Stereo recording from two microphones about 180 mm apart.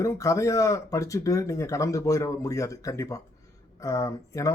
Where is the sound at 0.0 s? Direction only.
20° left (ahead or behind).